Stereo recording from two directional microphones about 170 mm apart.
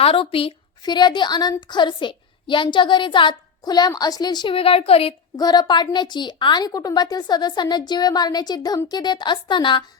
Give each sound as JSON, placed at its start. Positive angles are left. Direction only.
{"t": 0.0, "sound": "a woman's voice", "side_deg": 35}
{"t": 5.4, "sound": "a woman's voice", "side_deg": 25}